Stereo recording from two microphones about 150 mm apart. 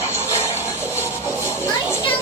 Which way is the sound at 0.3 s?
20° left (ahead or behind).